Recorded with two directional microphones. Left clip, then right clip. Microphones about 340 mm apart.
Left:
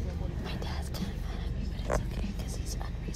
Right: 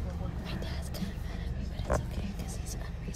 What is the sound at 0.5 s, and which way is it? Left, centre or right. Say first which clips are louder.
Vehicle: left 2 dB; centre.